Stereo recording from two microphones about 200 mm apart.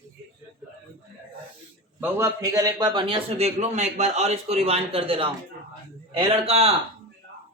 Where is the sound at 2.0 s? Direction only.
10° right (ahead or behind); by 6.7 s 30° right (ahead or behind).